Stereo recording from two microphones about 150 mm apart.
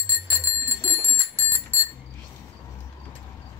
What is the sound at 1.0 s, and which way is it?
Bicycle bell, 15° right (ahead or behind).